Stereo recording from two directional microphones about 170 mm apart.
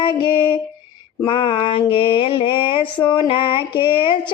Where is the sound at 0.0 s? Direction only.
30° left (ahead or behind).